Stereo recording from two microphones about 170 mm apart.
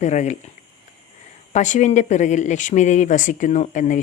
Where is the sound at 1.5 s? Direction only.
45° left (ahead or behind).